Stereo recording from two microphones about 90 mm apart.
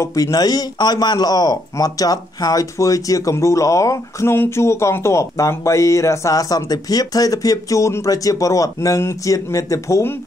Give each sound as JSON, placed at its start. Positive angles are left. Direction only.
{"t": 0.0, "sound": "a man's voice", "side_deg": 40}